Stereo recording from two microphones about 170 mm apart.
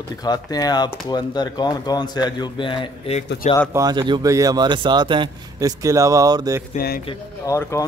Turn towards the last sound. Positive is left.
turn(degrees=15)  # may be behind; listen again after turning